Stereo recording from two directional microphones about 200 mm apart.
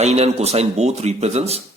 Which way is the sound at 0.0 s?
35° right (ahead or behind).